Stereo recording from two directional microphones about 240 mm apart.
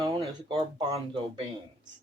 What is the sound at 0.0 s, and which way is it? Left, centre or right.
Speech, right.